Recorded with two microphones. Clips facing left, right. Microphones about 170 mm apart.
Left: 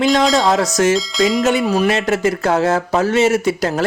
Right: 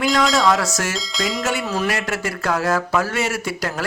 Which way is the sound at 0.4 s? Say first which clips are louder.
Left 3 dB; 20° left (ahead or behind).